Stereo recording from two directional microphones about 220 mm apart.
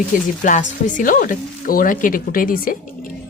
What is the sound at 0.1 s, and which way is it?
Speech, 40° left (ahead or behind).